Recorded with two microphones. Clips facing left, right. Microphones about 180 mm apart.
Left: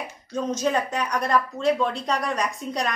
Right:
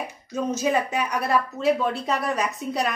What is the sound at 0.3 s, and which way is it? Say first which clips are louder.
A woman's voice: right 1 dB; 5° right (ahead or behind).